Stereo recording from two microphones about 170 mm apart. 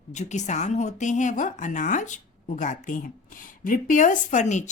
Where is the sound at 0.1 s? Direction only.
45° left (ahead or behind).